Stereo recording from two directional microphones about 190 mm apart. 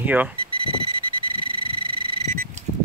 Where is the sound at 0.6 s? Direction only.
25° right (ahead or behind).